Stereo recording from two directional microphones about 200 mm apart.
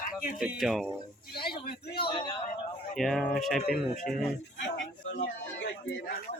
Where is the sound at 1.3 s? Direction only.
50° left (ahead or behind).